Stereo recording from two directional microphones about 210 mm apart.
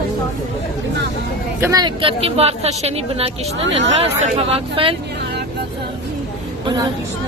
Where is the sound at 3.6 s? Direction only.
60° right (ahead or behind).